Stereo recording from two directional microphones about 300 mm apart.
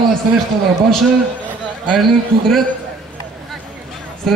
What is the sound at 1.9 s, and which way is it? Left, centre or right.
Speech, centre.